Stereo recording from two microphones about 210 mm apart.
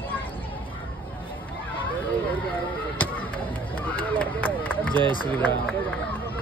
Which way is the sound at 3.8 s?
5° left (ahead or behind).